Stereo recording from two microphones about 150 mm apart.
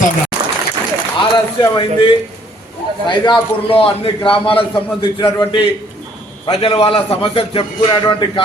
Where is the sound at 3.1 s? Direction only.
35° left (ahead or behind).